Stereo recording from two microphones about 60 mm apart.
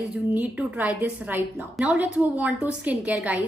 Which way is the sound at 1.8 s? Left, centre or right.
Centre.